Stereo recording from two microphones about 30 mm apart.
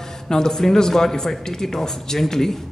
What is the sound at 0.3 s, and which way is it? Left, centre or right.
A man's voice, centre.